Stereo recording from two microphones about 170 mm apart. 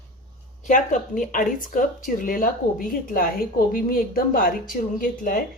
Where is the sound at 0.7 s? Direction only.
50° left (ahead or behind).